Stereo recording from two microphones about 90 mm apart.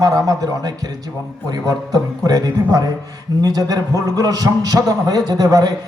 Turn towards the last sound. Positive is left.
turn(degrees=-45)  # may be behind; listen again after turning